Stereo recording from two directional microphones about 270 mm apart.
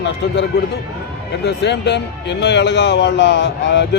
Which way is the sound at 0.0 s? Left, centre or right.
Left.